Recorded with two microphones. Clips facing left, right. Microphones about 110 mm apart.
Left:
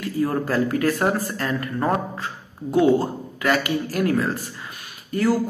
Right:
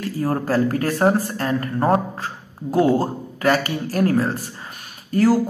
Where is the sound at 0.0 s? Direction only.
35° right (ahead or behind).